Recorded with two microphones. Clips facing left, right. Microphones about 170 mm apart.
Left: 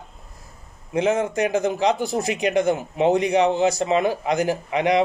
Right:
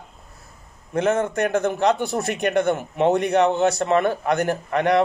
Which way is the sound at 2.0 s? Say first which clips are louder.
Left 1 dB; 65° right (ahead or behind).